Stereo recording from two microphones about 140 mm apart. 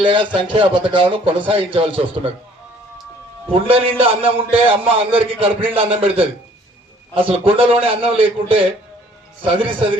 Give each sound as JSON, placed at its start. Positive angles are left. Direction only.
{"t": 0.0, "sound": "a man's voice", "side_deg": -35}
{"t": 3.5, "sound": "a man's voice", "side_deg": -40}